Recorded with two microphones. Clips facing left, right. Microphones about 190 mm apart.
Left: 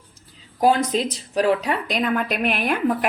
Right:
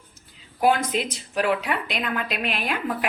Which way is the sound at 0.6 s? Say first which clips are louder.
Left 3 dB; 35° left (ahead or behind).